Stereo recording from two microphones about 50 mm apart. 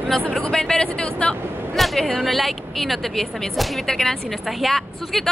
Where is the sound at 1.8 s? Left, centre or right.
Centre.